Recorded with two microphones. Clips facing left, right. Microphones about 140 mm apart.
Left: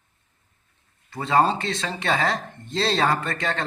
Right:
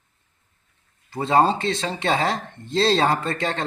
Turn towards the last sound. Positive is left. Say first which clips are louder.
# right 2 dB
turn(degrees=-30)  # may be behind; listen again after turning